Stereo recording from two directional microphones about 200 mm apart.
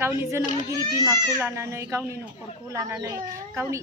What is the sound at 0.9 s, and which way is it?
Speech, 15° right (ahead or behind).